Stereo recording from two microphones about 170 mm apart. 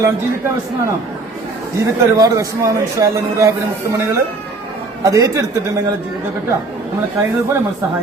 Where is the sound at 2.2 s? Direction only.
20° right (ahead or behind).